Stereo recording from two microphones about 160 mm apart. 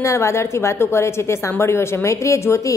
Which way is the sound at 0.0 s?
15° left (ahead or behind).